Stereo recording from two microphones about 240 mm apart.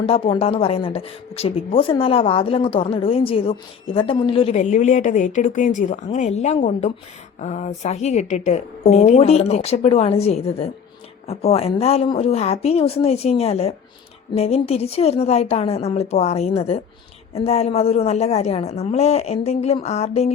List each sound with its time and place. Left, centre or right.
0.0 s a woman's voice: left